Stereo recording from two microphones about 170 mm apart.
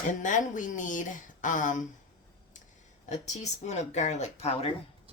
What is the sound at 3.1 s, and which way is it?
Speech, 40° left (ahead or behind).